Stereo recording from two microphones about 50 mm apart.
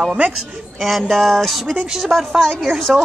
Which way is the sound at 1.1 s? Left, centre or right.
Centre.